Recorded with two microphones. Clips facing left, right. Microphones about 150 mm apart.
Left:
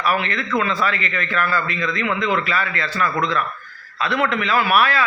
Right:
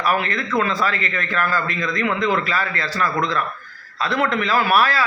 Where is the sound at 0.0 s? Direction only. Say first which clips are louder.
Even; 40° right (ahead or behind).